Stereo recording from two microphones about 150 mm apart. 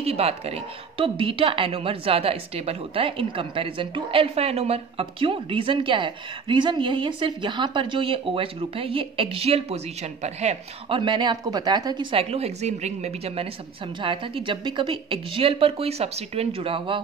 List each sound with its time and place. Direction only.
0.0 s a woman's voice: 40° right (ahead or behind)
11.0 s a woman's voice: 30° right (ahead or behind)